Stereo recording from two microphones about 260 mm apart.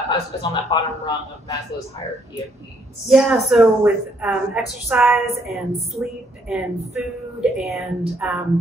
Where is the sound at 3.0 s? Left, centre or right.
Centre.